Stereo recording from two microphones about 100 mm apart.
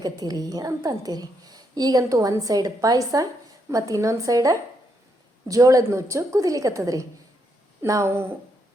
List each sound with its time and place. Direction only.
0.0 s a woman's voice: 40° right (ahead or behind); by 8.3 s 25° right (ahead or behind)